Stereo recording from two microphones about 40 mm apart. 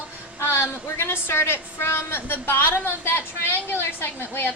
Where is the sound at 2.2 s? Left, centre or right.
Left.